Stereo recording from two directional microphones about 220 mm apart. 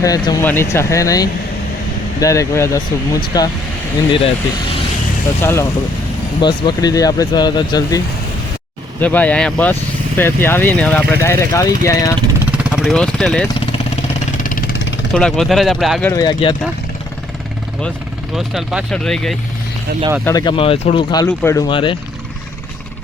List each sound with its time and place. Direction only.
0.0 s speech: 15° left (ahead or behind)
5.4 s speech: 10° left (ahead or behind)
12.5 s vehicle: centre (ahead or behind)
14.4 s vehicle: 40° left (ahead or behind)
15.1 s speech: 5° left (ahead or behind)
16.1 s speech: 20° left (ahead or behind)
18.3 s speech: centre (ahead or behind)
20.2 s speech: 15° left (ahead or behind)